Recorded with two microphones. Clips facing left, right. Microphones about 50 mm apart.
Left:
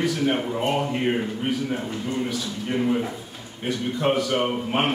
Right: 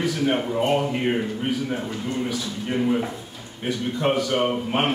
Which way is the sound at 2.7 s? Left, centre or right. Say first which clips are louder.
Right 1 dB; centre.